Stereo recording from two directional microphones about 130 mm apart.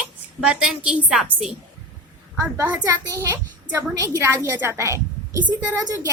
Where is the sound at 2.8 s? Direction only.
25° right (ahead or behind).